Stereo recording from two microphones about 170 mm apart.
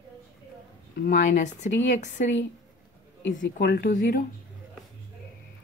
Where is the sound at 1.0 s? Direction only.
50° left (ahead or behind).